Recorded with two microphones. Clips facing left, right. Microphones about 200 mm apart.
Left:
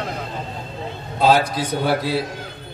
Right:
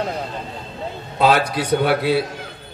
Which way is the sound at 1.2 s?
65° right (ahead or behind).